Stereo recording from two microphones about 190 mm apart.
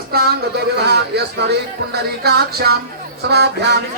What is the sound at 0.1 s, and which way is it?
Speech, 55° right (ahead or behind).